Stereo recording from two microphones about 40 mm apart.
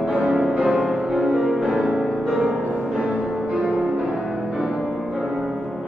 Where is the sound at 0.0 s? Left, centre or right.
Right.